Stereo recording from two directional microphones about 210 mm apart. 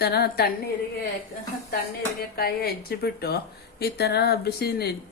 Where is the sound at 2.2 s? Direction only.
45° left (ahead or behind).